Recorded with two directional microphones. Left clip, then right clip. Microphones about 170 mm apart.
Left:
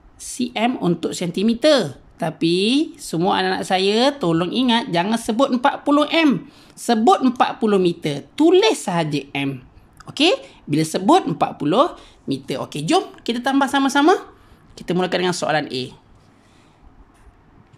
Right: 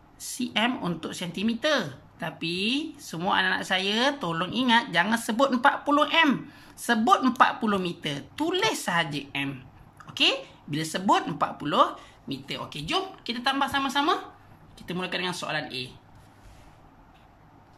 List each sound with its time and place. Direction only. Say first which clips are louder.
0.2 s speech: left 5 dB; 20° left (ahead or behind); by 15.9 s 45° left (ahead or behind)